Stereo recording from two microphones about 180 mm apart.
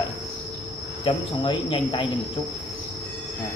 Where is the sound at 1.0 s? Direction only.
30° left (ahead or behind).